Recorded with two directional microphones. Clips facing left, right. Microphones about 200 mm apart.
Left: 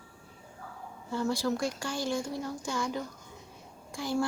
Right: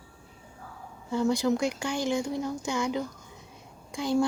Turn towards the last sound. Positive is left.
turn(degrees=-20)  # may be behind; listen again after turning